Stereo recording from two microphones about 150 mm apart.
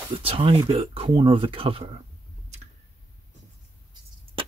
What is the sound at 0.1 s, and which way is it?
Speech, 40° right (ahead or behind).